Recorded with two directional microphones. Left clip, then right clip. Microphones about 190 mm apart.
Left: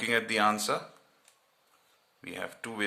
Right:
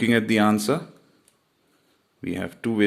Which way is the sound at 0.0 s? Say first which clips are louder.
Right 6 dB; 25° right (ahead or behind).